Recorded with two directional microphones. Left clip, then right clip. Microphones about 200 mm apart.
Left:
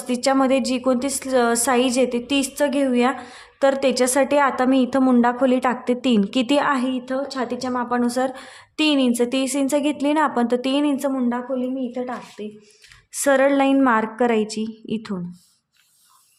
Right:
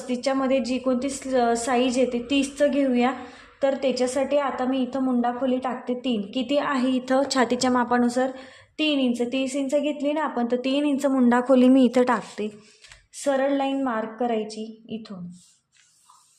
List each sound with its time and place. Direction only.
0.1 s a woman's voice: 25° left (ahead or behind)
6.7 s a woman's voice: 15° left (ahead or behind)
6.9 s a woman's voice: 5° right (ahead or behind)
8.0 s a woman's voice: 10° left (ahead or behind)
8.4 s a woman's voice: 30° left (ahead or behind); by 11.2 s 5° left (ahead or behind)
11.2 s a woman's voice: 20° right (ahead or behind)
11.5 s a man's voice: 45° right (ahead or behind)
13.1 s a woman's voice: 35° left (ahead or behind)